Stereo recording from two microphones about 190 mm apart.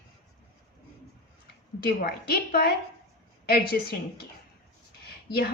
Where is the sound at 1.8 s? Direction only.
50° left (ahead or behind).